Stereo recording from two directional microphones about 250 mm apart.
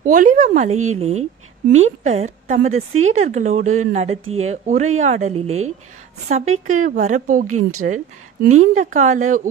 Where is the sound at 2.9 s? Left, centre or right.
Right.